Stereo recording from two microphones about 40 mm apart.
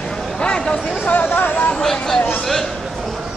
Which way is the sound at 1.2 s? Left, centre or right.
Left.